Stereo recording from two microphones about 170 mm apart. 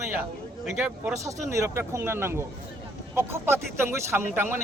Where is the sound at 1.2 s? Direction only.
15° right (ahead or behind).